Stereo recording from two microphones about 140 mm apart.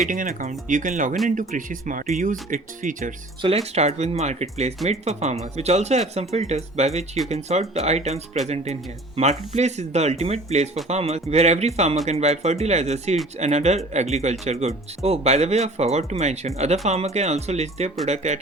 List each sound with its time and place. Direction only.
0.1 s speech: 70° right (ahead or behind)
3.4 s speech: 45° right (ahead or behind)